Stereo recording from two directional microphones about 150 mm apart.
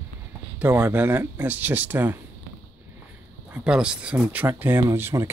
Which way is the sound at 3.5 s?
5° right (ahead or behind).